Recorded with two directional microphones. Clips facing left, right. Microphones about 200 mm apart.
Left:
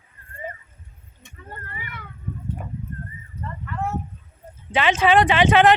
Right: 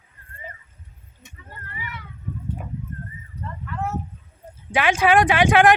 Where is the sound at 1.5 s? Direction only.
50° left (ahead or behind).